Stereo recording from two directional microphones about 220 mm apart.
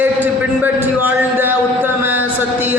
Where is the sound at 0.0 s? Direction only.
10° right (ahead or behind).